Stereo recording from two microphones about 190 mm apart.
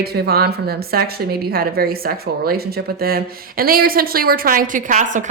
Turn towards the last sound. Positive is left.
turn(degrees=-40)  # may be behind; listen again after turning